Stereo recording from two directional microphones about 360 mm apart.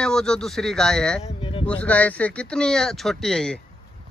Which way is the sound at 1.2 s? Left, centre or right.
Centre.